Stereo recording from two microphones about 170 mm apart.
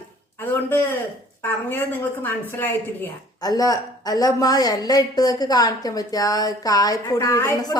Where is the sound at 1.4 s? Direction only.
10° left (ahead or behind).